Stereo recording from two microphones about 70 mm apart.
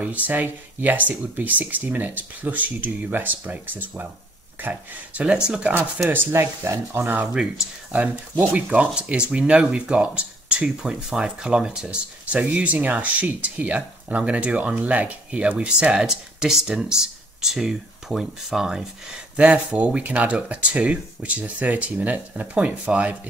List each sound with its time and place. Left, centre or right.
0.0 s speech: right
5.9 s speech: right
7.2 s speech: centre
8.0 s speech: right